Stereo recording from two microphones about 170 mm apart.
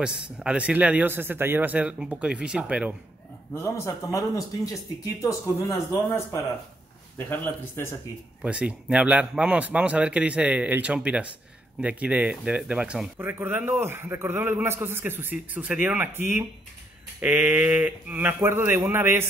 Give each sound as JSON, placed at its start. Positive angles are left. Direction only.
{"t": 0.0, "sound": "a man's voice", "side_deg": -5}
{"t": 3.5, "sound": "speech", "side_deg": 15}
{"t": 8.4, "sound": "a man's voice", "side_deg": -5}